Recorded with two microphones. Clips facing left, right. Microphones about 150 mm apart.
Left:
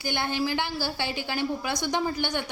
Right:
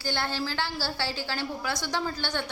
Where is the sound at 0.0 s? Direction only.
15° left (ahead or behind).